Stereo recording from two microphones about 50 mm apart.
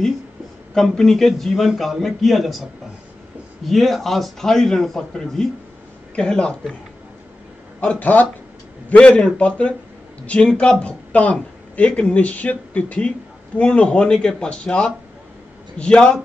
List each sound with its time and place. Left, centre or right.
0.7 s a man's voice: centre
3.6 s a man's voice: centre
6.1 s speech: centre
7.8 s speech: left
8.8 s speech: left